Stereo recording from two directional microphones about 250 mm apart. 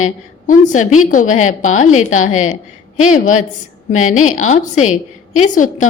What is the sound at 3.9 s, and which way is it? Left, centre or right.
A woman's voice, left.